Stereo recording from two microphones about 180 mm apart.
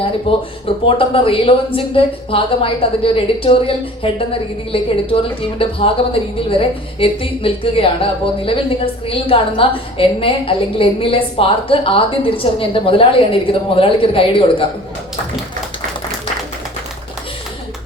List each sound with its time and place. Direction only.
0.0 s a woman's voice: 30° left (ahead or behind)